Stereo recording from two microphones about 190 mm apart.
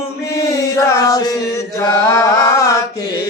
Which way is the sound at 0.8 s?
15° left (ahead or behind).